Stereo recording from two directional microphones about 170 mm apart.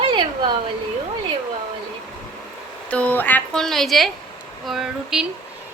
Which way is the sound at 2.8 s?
10° left (ahead or behind).